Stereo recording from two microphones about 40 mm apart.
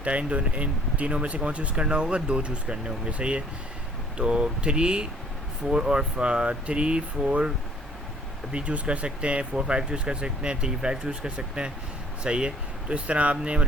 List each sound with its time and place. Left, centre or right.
0.0 s speech: right
8.5 s speech: right